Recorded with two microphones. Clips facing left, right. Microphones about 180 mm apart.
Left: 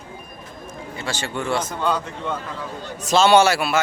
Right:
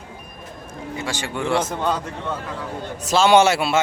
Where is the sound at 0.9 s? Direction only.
15° right (ahead or behind).